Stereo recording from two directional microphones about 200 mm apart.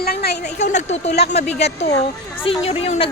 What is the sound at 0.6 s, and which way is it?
Speech, 35° left (ahead or behind).